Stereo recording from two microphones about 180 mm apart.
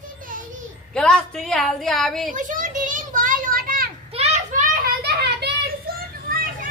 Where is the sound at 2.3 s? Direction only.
45° right (ahead or behind).